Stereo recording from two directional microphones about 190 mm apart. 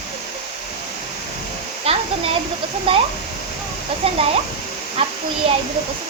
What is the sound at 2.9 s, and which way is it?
Speech, 30° right (ahead or behind).